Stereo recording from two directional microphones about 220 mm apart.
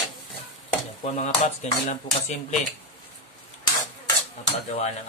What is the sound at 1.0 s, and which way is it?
Cutlery, 30° left (ahead or behind).